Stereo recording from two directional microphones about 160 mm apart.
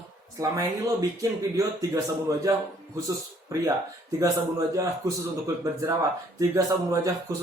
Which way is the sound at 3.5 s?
20° right (ahead or behind).